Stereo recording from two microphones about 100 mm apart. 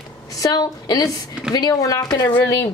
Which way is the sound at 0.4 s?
40° left (ahead or behind).